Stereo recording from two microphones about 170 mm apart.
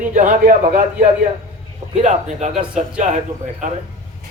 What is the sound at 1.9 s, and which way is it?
Speech, 45° right (ahead or behind).